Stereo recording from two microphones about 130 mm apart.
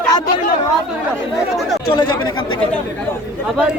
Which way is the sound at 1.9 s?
40° left (ahead or behind).